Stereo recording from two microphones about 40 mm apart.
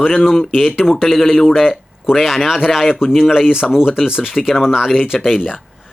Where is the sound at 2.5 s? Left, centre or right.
Centre.